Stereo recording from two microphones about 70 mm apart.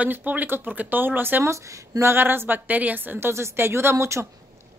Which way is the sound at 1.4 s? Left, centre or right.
Right.